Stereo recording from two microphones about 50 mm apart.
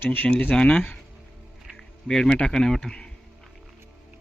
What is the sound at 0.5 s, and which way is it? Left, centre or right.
Speech, centre.